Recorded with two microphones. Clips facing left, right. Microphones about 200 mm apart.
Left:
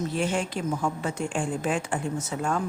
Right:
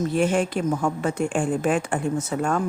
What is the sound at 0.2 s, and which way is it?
A woman's voice, 55° right (ahead or behind).